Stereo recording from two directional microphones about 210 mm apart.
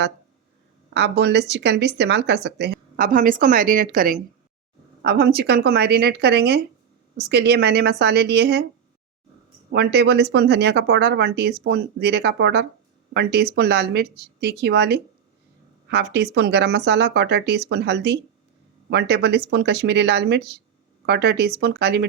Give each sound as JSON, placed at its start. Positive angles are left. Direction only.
{"t": 0.9, "sound": "speech", "side_deg": -55}
{"t": 9.7, "sound": "speech", "side_deg": -50}